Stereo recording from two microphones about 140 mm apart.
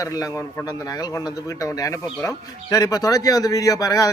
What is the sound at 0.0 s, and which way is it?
A man's voice, 25° left (ahead or behind).